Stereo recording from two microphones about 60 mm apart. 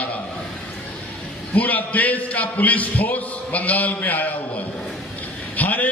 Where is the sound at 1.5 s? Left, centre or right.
Left.